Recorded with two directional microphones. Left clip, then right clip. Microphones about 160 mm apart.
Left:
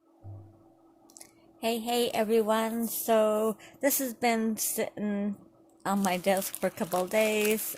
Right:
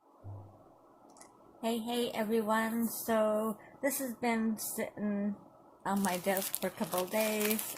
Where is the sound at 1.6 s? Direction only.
65° left (ahead or behind).